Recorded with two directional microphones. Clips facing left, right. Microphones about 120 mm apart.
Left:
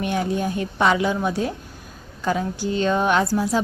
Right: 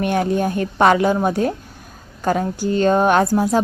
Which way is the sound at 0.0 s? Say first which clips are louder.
Right 5 dB; 55° right (ahead or behind).